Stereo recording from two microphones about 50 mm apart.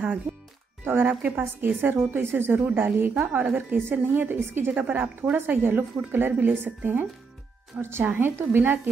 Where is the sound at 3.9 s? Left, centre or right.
Right.